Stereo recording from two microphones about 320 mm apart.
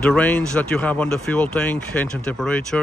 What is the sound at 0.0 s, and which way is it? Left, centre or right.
Speech, centre.